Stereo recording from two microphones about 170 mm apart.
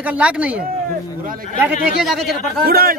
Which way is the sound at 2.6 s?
60° right (ahead or behind).